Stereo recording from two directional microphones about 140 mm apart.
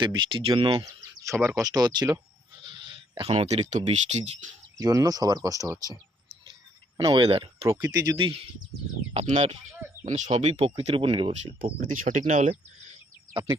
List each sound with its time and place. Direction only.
0.0 s speech: 35° right (ahead or behind)
2.6 s a sound: 35° right (ahead or behind)
3.3 s speech: 55° right (ahead or behind)
4.8 s speech: 25° right (ahead or behind)
6.5 s a sound: 30° right (ahead or behind)
7.3 s speech: 45° right (ahead or behind)
7.9 s speech: 30° right (ahead or behind)
9.1 s speech: 55° right (ahead or behind)
11.0 s speech: 35° right (ahead or behind)
11.6 s speech: 65° right (ahead or behind)